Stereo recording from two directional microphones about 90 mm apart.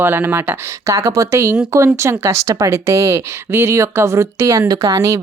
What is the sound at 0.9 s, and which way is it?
Speech, 35° right (ahead or behind).